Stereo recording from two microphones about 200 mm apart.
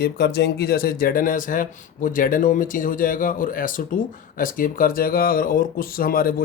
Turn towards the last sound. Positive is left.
turn(degrees=45)  # may be behind; listen again after turning